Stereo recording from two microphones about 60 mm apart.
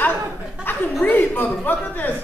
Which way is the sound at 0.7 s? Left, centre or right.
Left.